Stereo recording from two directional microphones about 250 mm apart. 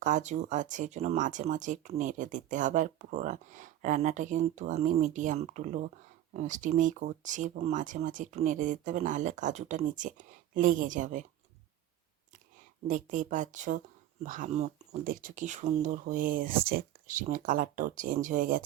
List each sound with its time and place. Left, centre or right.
0.0 s speech: right
12.9 s speech: right